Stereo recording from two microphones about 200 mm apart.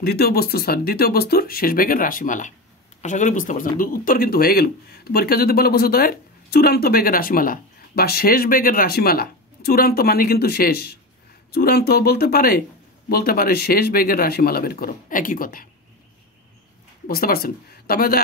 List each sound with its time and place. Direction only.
0.0 s speech: 50° left (ahead or behind)
17.1 s speech: 50° left (ahead or behind)